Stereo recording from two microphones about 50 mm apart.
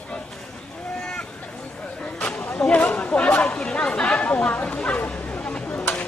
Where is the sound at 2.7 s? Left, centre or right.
Left.